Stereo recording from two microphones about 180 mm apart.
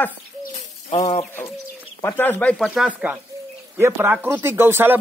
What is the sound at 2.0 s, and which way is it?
Speech, 10° left (ahead or behind).